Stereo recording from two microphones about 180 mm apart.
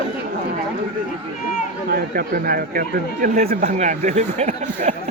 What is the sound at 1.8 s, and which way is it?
Speech, 55° right (ahead or behind).